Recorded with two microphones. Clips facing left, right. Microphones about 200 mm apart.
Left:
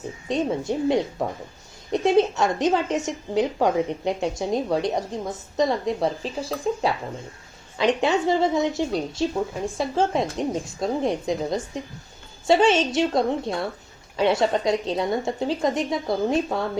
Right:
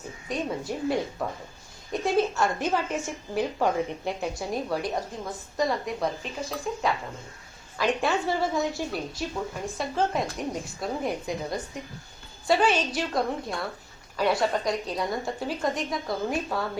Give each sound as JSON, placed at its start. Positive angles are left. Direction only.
{"t": 0.3, "sound": "a woman's voice", "side_deg": 25}
{"t": 7.8, "sound": "a woman's voice", "side_deg": 20}